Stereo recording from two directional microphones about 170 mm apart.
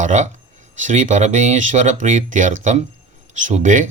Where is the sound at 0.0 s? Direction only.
45° right (ahead or behind).